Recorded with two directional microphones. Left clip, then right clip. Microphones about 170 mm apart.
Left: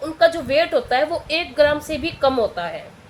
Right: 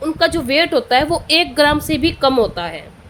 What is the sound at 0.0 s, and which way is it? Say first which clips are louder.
A woman's voice: right 1 dB; 60° right (ahead or behind).